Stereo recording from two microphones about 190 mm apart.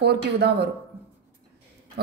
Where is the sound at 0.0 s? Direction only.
60° right (ahead or behind).